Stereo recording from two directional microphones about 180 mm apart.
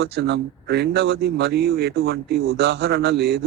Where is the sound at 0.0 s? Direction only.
65° right (ahead or behind).